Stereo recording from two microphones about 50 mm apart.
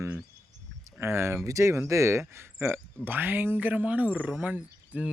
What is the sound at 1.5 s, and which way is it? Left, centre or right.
Speech, right.